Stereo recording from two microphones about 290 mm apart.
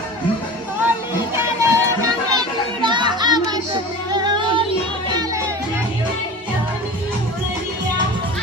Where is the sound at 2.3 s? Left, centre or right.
Centre.